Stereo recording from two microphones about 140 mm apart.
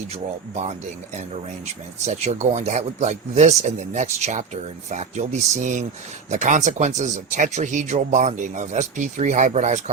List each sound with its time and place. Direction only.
0.1 s speech: 55° right (ahead or behind)